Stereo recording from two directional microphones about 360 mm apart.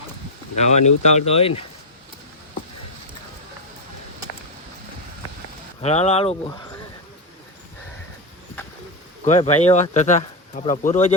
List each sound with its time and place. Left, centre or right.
0.5 s speech: centre
5.8 s speech: centre
9.2 s speech: centre